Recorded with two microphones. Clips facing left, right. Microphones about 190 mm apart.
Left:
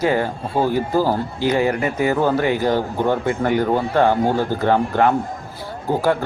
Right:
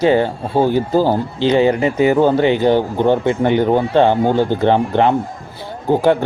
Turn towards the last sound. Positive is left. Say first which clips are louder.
# right 5 dB
turn(degrees=-20)  # may be behind; listen again after turning